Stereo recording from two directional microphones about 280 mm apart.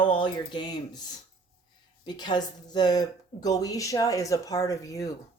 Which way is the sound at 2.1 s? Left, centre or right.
Centre.